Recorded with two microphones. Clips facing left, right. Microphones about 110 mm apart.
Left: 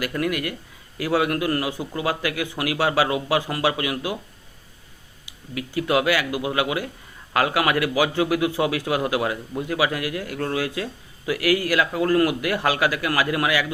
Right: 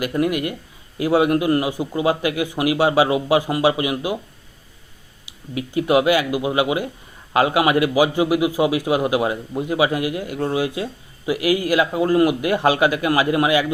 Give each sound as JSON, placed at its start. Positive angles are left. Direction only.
{"t": 0.0, "sound": "a man's voice", "side_deg": -20}
{"t": 5.5, "sound": "a man's voice", "side_deg": -20}